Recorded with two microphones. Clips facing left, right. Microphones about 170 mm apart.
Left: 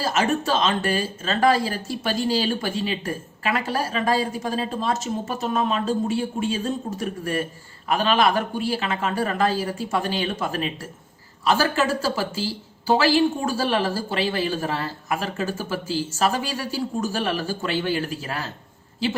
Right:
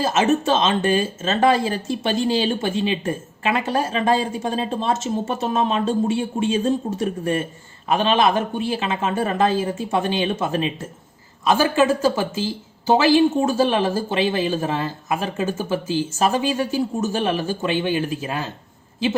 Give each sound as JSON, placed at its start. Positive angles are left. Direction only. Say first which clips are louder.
{"t": 0.0, "sound": "speech", "louder": "right 4 dB", "side_deg": -20}